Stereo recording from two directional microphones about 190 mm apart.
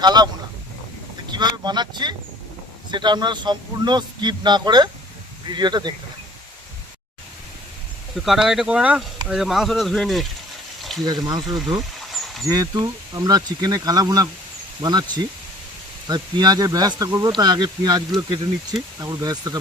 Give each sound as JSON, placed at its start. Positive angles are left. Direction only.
{"t": 0.0, "sound": "speech", "side_deg": -20}
{"t": 1.3, "sound": "speech", "side_deg": -20}
{"t": 8.1, "sound": "speech", "side_deg": 0}
{"t": 11.0, "sound": "speech", "side_deg": -20}
{"t": 11.5, "sound": "a sound", "side_deg": 0}
{"t": 12.5, "sound": "speech", "side_deg": -20}
{"t": 16.0, "sound": "speech", "side_deg": -20}